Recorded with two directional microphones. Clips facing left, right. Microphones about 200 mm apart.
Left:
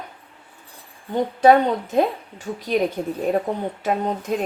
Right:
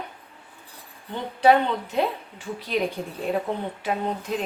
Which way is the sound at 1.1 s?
45° left (ahead or behind).